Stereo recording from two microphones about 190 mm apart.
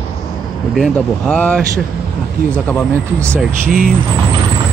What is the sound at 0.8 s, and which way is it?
Speech, 5° left (ahead or behind).